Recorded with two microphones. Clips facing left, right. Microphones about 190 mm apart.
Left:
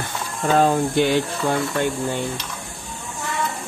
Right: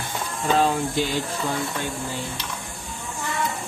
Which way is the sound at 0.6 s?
55° left (ahead or behind).